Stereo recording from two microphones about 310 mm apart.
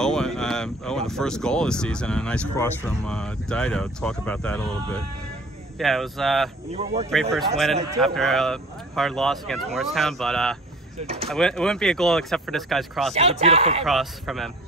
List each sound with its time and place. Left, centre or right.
0.0 s speech: centre
5.8 s speech: centre
6.7 s speech: centre
7.3 s speech: centre
7.7 s a man's voice: centre
8.0 s speech: centre
13.1 s speech: centre
13.8 s speech: centre